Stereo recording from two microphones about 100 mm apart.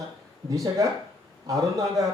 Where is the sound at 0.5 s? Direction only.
35° right (ahead or behind).